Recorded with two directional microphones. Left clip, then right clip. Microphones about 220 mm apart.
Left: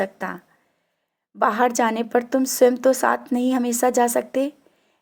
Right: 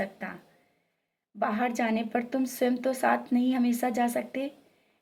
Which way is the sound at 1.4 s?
40° left (ahead or behind).